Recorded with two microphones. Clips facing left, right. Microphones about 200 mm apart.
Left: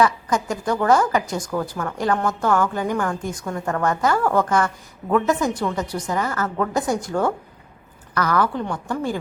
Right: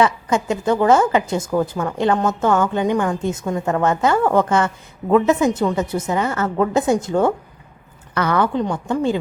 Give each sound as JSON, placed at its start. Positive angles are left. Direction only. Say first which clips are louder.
{"t": 0.0, "sound": "a woman's voice", "louder": "right 2 dB", "side_deg": -25}